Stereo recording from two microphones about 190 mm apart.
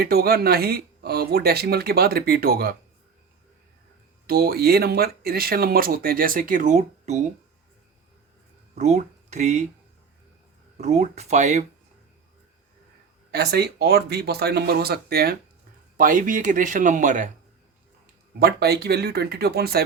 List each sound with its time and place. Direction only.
0.0 s speech: 55° right (ahead or behind)
4.3 s speech: 55° right (ahead or behind); by 7.2 s 35° right (ahead or behind)
8.7 s speech: 35° right (ahead or behind)
10.8 s speech: 35° right (ahead or behind)
13.3 s speech: 60° right (ahead or behind); by 17.3 s 40° right (ahead or behind)
18.3 s speech: 55° right (ahead or behind)